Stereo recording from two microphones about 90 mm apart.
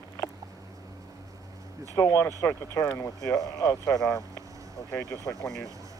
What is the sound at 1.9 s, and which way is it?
Speech, 35° left (ahead or behind).